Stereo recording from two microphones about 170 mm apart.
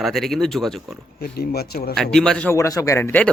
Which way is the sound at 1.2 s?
65° left (ahead or behind).